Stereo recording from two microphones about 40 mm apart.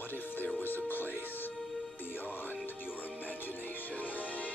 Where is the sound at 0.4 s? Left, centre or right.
Left.